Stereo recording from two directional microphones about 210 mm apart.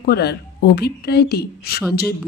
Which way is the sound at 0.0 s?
50° left (ahead or behind).